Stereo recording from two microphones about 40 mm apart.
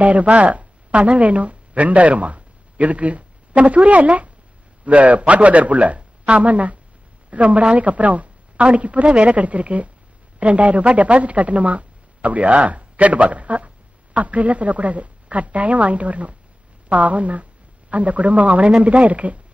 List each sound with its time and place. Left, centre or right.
0.0 s a woman's voice: right